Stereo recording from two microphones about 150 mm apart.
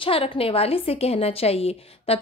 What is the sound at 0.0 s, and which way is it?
A woman's voice, 40° left (ahead or behind).